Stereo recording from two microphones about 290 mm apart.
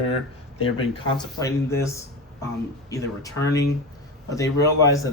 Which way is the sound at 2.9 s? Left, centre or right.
Centre.